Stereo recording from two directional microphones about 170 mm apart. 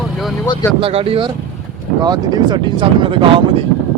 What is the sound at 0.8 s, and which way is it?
Speech, 35° right (ahead or behind).